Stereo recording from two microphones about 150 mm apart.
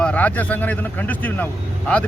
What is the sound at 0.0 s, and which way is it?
A man's voice, 10° left (ahead or behind).